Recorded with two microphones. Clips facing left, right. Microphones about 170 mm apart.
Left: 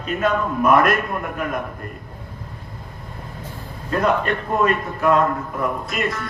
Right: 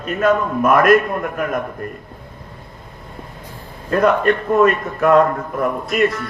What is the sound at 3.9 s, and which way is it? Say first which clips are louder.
A man's voice: right 5 dB; 50° right (ahead or behind).